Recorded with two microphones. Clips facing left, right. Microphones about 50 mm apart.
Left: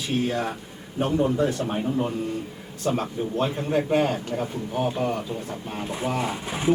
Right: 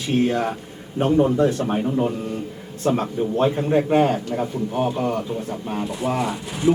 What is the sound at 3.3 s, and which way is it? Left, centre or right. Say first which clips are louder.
A man's voice: right 5 dB; centre.